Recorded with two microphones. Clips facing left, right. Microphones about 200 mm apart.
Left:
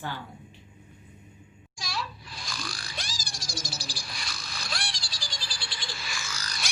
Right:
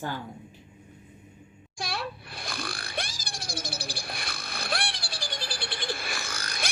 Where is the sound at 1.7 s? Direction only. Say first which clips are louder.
Right 3 dB; 55° right (ahead or behind).